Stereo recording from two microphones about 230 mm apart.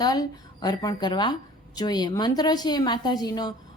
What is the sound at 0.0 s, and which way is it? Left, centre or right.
A woman's voice, centre.